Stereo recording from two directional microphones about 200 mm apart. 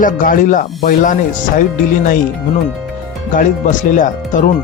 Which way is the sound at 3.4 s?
40° left (ahead or behind).